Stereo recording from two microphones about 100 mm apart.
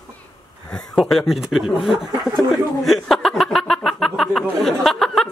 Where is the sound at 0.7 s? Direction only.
5° left (ahead or behind).